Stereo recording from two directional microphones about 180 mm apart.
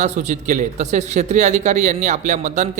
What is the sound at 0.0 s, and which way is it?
A man's voice, 40° right (ahead or behind).